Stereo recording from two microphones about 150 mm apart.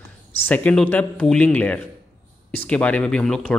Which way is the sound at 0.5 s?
10° left (ahead or behind).